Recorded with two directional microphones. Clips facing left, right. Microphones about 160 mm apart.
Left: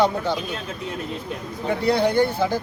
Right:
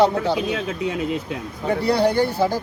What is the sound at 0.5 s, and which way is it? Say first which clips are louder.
Speech: right 6 dB; 90° right.